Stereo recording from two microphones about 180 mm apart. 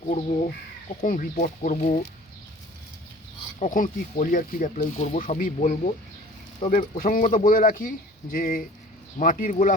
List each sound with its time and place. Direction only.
0.1 s speech: 45° left (ahead or behind)
3.6 s speech: 45° left (ahead or behind)
7.0 s speech: 50° left (ahead or behind)